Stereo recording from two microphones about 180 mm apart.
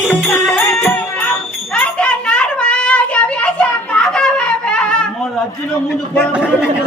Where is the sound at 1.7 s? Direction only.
5° left (ahead or behind).